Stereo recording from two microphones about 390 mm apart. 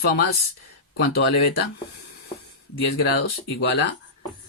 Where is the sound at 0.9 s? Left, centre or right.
Left.